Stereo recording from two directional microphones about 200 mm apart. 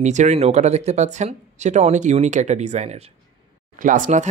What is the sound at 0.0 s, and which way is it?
Speech, 35° right (ahead or behind).